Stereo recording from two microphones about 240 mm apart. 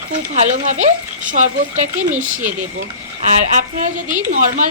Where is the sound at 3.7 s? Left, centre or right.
Right.